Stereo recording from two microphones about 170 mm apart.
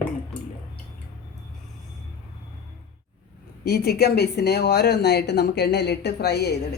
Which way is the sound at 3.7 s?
70° left (ahead or behind).